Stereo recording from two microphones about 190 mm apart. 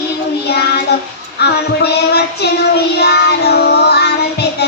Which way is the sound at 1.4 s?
60° left (ahead or behind).